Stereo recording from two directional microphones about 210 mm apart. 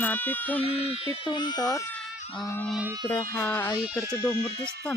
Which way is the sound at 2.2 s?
25° left (ahead or behind).